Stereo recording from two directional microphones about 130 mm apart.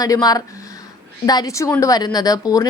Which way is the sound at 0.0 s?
30° left (ahead or behind).